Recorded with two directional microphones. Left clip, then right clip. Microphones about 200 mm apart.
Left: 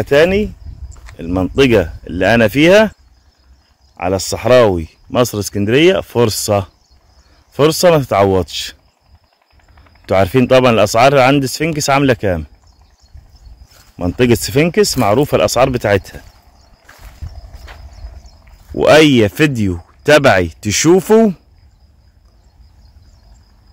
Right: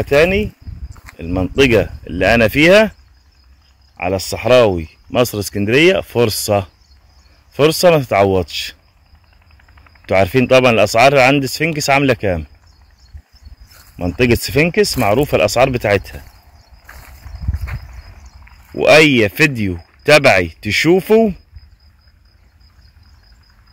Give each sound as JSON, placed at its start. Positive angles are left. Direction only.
{"t": 0.0, "sound": "speech", "side_deg": 25}
{"t": 3.9, "sound": "speech", "side_deg": 25}
{"t": 10.0, "sound": "speech", "side_deg": 20}
{"t": 13.9, "sound": "speech", "side_deg": 25}
{"t": 18.8, "sound": "speech", "side_deg": 20}